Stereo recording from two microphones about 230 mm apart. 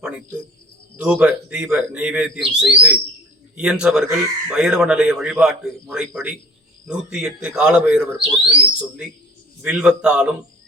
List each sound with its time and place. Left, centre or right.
0.9 s speech: centre